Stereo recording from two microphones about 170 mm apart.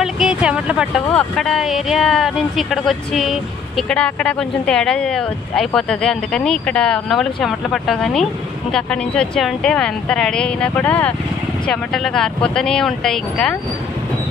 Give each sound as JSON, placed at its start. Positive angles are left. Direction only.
{"t": 0.0, "sound": "speech", "side_deg": -5}